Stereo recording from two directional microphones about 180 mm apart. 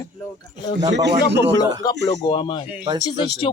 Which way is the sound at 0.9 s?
70° right (ahead or behind).